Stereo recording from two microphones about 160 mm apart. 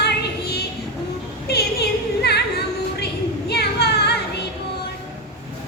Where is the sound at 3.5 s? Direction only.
90° left.